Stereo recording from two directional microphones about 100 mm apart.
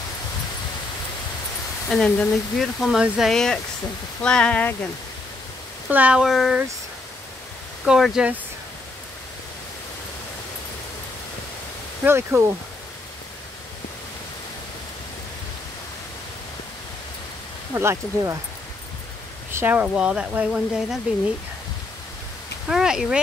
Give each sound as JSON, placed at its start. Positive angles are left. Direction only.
{"t": 1.9, "sound": "speech", "side_deg": 10}
{"t": 5.9, "sound": "speech", "side_deg": -15}
{"t": 7.8, "sound": "speech", "side_deg": -5}
{"t": 12.0, "sound": "speech", "side_deg": -25}
{"t": 17.7, "sound": "speech", "side_deg": -25}
{"t": 19.5, "sound": "speech", "side_deg": -20}
{"t": 22.7, "sound": "speech", "side_deg": -5}